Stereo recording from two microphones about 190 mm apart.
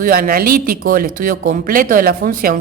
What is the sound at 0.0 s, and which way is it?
A woman's voice, 50° right (ahead or behind).